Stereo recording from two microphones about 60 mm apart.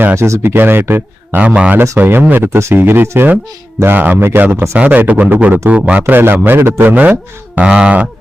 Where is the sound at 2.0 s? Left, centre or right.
Right.